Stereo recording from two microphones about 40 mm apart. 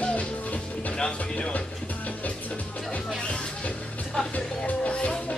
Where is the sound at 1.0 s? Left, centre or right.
Left.